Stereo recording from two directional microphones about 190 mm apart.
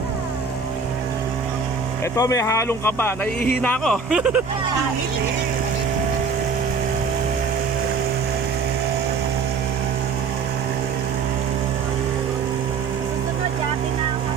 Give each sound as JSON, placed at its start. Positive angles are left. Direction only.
{"t": 2.1, "sound": "speech", "side_deg": 15}